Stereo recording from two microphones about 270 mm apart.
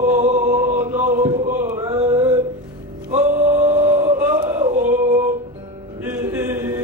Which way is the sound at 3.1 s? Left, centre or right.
Centre.